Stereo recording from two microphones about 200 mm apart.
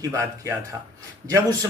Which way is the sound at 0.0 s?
15° right (ahead or behind).